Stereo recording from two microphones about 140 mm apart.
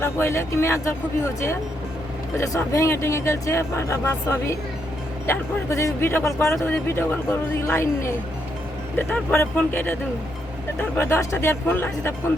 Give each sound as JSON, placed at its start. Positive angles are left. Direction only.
{"t": 0.0, "sound": "speech", "side_deg": 20}
{"t": 2.3, "sound": "speech", "side_deg": 20}